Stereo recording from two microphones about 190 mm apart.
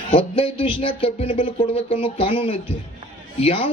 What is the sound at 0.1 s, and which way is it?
Speech, 30° left (ahead or behind).